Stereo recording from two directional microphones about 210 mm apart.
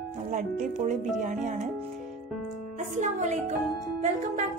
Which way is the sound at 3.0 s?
35° right (ahead or behind).